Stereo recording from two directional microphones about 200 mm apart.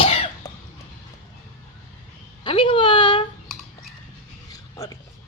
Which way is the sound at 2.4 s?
25° left (ahead or behind).